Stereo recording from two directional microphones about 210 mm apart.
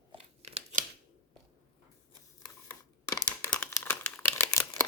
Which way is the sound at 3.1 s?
15° left (ahead or behind).